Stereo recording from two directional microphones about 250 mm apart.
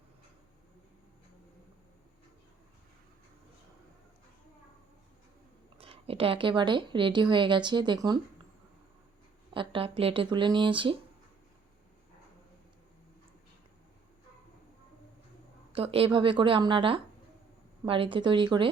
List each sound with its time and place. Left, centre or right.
5.7 s speech: right
9.5 s speech: right
15.7 s speech: right